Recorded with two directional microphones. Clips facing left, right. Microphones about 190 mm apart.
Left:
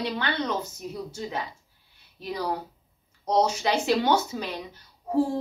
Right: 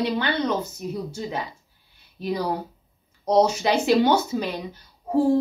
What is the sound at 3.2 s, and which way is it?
A woman's voice, 10° right (ahead or behind).